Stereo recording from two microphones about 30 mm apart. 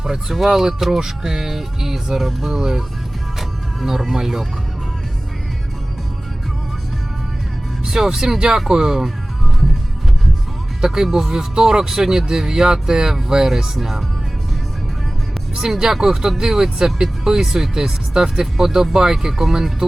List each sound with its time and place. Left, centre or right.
0.0 s speech: centre
3.8 s speech: centre
7.9 s speech: centre
10.8 s speech: centre
13.7 s speech: centre
15.5 s speech: centre